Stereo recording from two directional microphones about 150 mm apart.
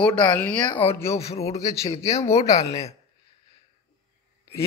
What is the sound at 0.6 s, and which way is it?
Speech, 35° left (ahead or behind).